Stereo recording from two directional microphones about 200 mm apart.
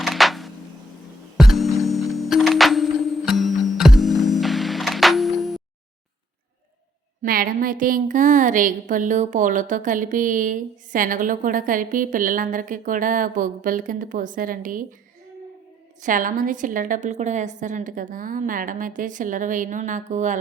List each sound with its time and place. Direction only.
0.0 s a sound: centre (ahead or behind)
1.4 s music: centre (ahead or behind)
7.2 s a woman's voice: 45° right (ahead or behind)
16.0 s a woman's voice: 40° right (ahead or behind)